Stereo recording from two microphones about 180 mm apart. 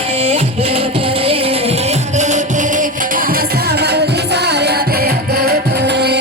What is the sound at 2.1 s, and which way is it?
Music, 40° right (ahead or behind).